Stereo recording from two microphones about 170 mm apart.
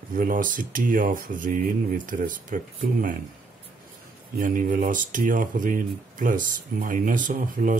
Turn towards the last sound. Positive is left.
turn(degrees=-50)  # may be behind; listen again after turning